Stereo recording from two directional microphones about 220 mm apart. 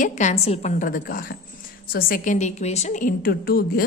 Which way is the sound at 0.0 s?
35° left (ahead or behind).